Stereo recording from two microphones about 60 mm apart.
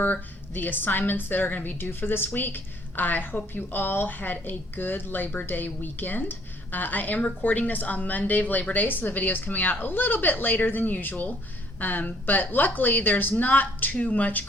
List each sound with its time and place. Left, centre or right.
0.0 s a woman's voice: left